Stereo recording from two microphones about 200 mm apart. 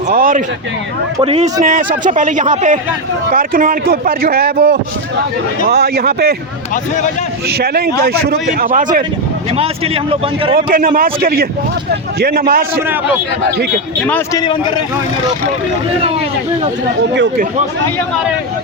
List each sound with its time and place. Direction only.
0.1 s speech: 45° right (ahead or behind)
1.2 s a man's voice: 30° right (ahead or behind); by 6.3 s 50° right (ahead or behind)
7.4 s a man's voice: 50° right (ahead or behind)
9.5 s a man's voice: 30° right (ahead or behind)
10.5 s a man's voice: 45° right (ahead or behind)
14.3 s a man's voice: 20° left (ahead or behind)